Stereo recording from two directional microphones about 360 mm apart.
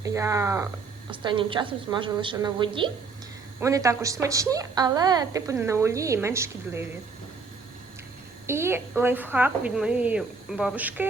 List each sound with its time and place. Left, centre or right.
0.0 s a woman's voice: centre
8.4 s a woman's voice: centre